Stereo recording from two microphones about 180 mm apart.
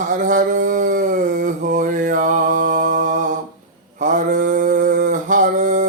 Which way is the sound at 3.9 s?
45° right (ahead or behind).